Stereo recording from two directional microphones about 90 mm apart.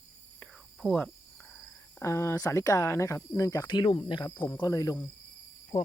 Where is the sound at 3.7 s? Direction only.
60° left (ahead or behind).